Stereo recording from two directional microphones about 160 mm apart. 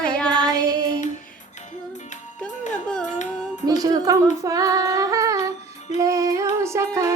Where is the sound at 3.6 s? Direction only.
20° right (ahead or behind).